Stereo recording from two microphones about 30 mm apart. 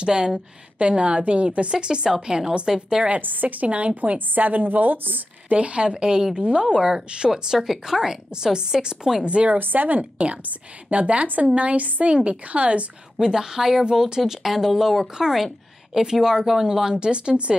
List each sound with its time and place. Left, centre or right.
0.0 s a woman's voice: right
0.7 s a woman's voice: right
3.1 s a woman's voice: right
3.6 s a woman's voice: right
4.4 s a woman's voice: right
5.5 s a woman's voice: right
5.9 s a woman's voice: right
7.5 s a woman's voice: centre
9.2 s a woman's voice: right
9.6 s a woman's voice: right
10.1 s a woman's voice: right
13.2 s a woman's voice: centre
14.4 s a woman's voice: centre
16.9 s a woman's voice: right